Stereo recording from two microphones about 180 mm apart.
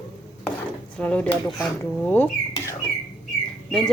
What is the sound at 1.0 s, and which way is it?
Speech, 5° left (ahead or behind).